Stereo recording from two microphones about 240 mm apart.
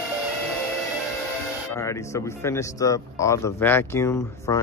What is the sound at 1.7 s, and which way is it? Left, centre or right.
Speech, centre.